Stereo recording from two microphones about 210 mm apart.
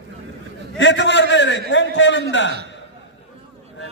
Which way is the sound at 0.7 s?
60° left (ahead or behind).